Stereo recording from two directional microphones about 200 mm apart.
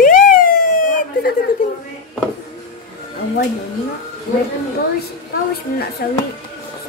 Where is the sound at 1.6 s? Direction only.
40° left (ahead or behind).